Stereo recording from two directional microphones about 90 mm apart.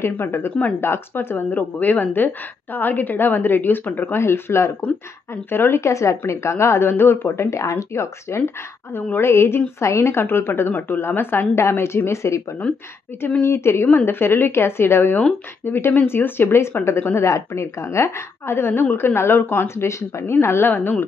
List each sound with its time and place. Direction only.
0.0 s a woman's voice: 25° left (ahead or behind)
12.6 s a woman's voice: 15° left (ahead or behind)
13.5 s speech: 30° left (ahead or behind)